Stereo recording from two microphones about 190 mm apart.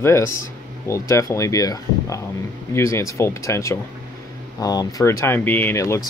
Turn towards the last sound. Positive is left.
turn(degrees=15)  # may be behind; listen again after turning